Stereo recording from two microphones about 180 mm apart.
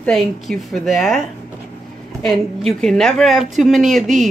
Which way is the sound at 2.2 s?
5° left (ahead or behind).